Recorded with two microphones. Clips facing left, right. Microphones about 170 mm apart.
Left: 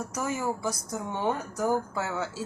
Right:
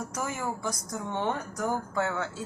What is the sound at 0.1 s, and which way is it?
A woman's voice, 10° left (ahead or behind).